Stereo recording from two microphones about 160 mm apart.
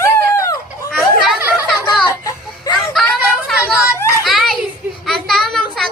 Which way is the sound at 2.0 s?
25° left (ahead or behind).